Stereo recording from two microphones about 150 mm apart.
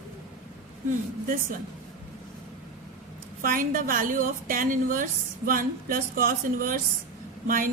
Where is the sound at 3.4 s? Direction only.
70° right (ahead or behind).